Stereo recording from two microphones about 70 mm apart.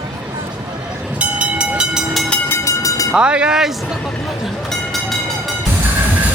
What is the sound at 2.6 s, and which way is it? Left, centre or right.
Train, left.